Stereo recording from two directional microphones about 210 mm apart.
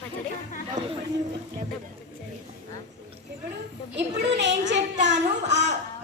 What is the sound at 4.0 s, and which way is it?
Speech, 55° right (ahead or behind).